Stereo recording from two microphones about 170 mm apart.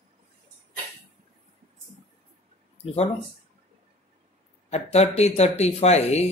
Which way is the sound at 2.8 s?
35° left (ahead or behind).